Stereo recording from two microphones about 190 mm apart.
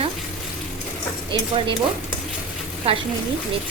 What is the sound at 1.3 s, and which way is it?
Speech, 25° right (ahead or behind).